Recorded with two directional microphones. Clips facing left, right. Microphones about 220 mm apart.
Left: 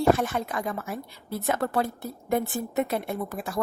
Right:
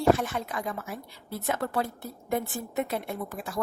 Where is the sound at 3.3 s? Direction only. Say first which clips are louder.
Left 3 dB; 60° left (ahead or behind).